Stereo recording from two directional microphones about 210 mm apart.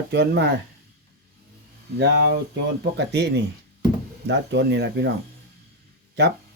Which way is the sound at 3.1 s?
55° right (ahead or behind).